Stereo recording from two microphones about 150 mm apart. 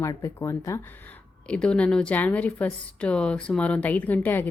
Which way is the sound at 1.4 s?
5° left (ahead or behind).